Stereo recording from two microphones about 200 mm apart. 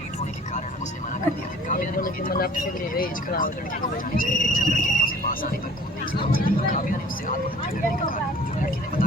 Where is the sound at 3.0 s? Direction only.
45° left (ahead or behind).